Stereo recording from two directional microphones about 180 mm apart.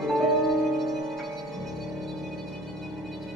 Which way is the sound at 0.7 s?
Centre (ahead or behind).